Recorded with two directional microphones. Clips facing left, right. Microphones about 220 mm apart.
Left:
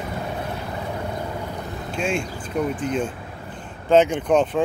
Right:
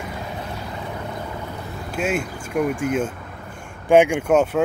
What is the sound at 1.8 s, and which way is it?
Speech, 5° right (ahead or behind).